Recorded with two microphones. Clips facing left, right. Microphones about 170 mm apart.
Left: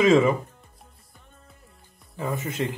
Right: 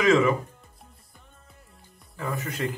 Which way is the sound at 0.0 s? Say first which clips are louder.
Left 2 dB; 30° left (ahead or behind).